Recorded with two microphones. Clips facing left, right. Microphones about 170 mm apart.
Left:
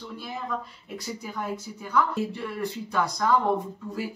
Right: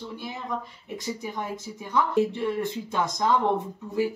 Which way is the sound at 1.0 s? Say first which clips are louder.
Right 1 dB; 20° right (ahead or behind).